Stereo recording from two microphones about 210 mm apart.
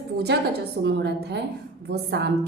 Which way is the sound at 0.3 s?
55° right (ahead or behind).